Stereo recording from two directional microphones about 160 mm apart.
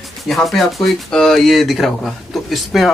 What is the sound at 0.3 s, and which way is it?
Speech, centre (ahead or behind).